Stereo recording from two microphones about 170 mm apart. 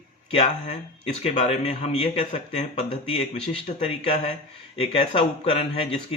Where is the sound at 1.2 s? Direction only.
40° left (ahead or behind).